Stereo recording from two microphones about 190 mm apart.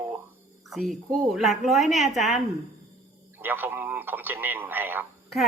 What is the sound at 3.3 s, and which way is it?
A woman's voice, 10° right (ahead or behind).